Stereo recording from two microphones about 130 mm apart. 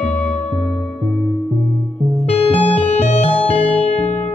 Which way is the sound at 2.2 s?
50° left (ahead or behind).